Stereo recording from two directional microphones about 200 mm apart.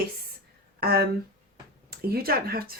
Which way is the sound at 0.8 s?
50° right (ahead or behind).